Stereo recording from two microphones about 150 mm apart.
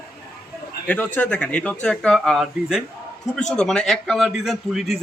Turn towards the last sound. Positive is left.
turn(degrees=0)  # may be behind; listen again after turning